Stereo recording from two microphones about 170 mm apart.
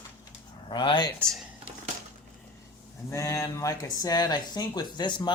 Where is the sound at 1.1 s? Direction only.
Centre (ahead or behind).